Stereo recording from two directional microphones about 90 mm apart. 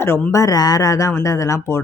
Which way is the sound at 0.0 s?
30° left (ahead or behind).